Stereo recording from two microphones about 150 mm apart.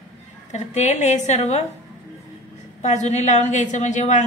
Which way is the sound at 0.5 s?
50° left (ahead or behind).